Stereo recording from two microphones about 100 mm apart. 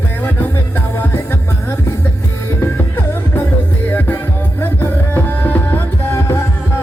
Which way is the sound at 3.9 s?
20° left (ahead or behind).